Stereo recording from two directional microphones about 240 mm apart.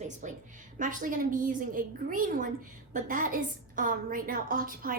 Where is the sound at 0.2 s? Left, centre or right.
Right.